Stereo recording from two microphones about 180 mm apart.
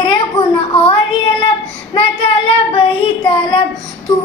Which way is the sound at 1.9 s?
30° left (ahead or behind).